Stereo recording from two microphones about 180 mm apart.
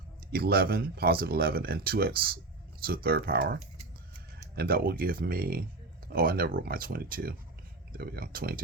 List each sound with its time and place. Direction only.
0.3 s speech: 60° right (ahead or behind)